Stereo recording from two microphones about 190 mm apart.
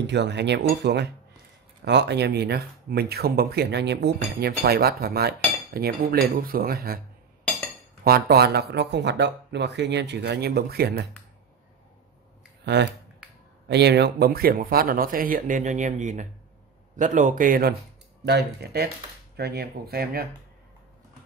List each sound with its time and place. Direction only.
0.0 s speech: 65° right (ahead or behind)
8.0 s speech: 55° right (ahead or behind)
13.7 s speech: 60° right (ahead or behind)
18.2 s speech: 60° right (ahead or behind)